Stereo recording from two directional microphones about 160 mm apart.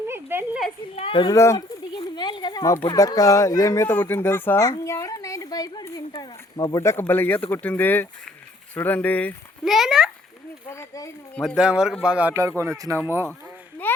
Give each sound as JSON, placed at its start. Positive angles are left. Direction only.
{"t": 0.1, "sound": "a sound", "side_deg": -15}
{"t": 0.9, "sound": "a child's voice", "side_deg": 35}
{"t": 1.4, "sound": "a sound", "side_deg": 20}
{"t": 2.0, "sound": "a sound", "side_deg": 30}
{"t": 2.8, "sound": "a woman's voice", "side_deg": 25}
{"t": 9.6, "sound": "speech", "side_deg": 0}
{"t": 10.7, "sound": "speech", "side_deg": 20}
{"t": 11.3, "sound": "speech", "side_deg": -5}
{"t": 13.8, "sound": "speech", "side_deg": 10}